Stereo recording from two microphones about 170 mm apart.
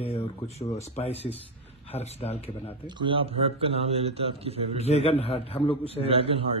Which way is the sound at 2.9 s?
30° right (ahead or behind).